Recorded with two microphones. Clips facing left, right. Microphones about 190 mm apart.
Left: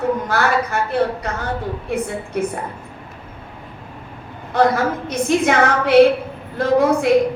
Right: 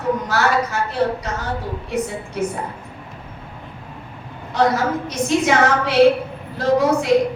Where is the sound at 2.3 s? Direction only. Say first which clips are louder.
Left 2 dB; 55° left (ahead or behind).